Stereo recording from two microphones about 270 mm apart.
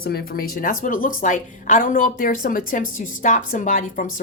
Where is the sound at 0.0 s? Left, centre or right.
Left.